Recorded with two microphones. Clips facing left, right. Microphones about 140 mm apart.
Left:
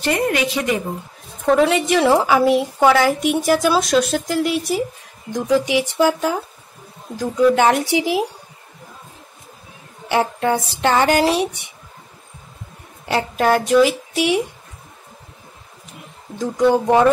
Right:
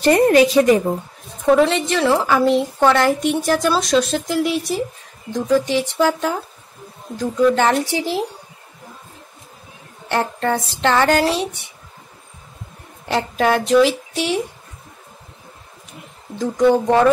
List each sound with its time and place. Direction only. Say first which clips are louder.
0.0 s a woman's voice: right 7 dB; 35° right (ahead or behind)
1.4 s a woman's voice: right 1 dB; centre (ahead or behind)
5.3 s a woman's voice: even; 10° left (ahead or behind)
10.0 s a woman's voice: left 2 dB; 10° left (ahead or behind)
13.0 s speech: even; centre (ahead or behind)
16.3 s speech: right 1 dB; centre (ahead or behind)
16.7 s a woman's voice: even; 15° left (ahead or behind)